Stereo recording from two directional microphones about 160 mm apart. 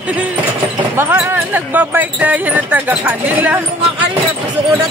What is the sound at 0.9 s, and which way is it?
Speech, 15° right (ahead or behind).